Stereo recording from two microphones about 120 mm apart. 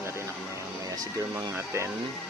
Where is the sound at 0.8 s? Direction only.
30° right (ahead or behind).